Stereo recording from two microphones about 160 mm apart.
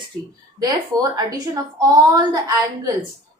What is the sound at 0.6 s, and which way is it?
A woman's voice, 20° right (ahead or behind).